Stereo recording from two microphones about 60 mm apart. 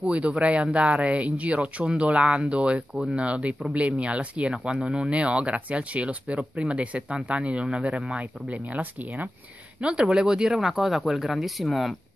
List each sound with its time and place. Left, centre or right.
0.0 s speech: right; by 12.0 s centre